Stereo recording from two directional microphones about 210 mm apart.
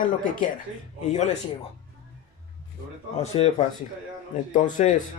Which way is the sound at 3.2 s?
30° left (ahead or behind).